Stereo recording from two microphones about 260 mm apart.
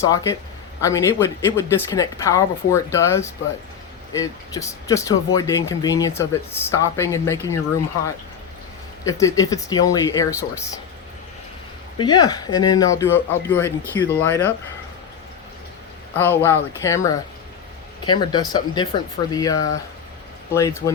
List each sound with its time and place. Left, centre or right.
0.0 s speech: centre
9.0 s speech: centre
11.9 s speech: centre
16.1 s speech: centre